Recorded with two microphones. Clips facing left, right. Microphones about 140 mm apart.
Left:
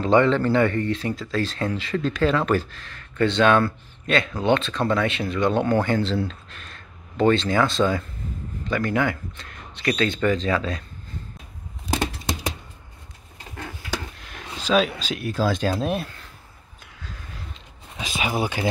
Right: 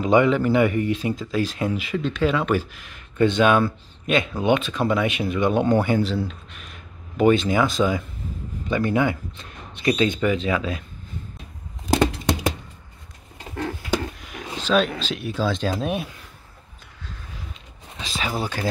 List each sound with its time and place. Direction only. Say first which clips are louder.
0.0 s speech: even; 10° right (ahead or behind)
14.1 s a sound: right 4 dB; 5° right (ahead or behind)
14.6 s speech: even; 5° left (ahead or behind)
17.9 s speech: left 2 dB; 15° left (ahead or behind)